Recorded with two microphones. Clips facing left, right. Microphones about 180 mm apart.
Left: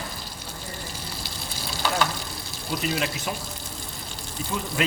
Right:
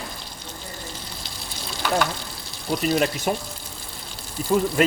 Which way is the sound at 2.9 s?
45° right (ahead or behind).